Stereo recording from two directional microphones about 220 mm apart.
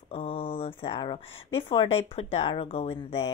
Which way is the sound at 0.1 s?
25° left (ahead or behind).